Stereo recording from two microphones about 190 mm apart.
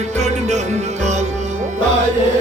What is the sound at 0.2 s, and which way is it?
Music, 35° right (ahead or behind).